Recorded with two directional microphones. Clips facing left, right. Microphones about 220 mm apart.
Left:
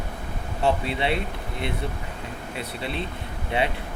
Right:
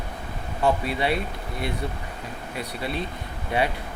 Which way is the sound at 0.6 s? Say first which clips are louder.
Right 1 dB; 25° left (ahead or behind).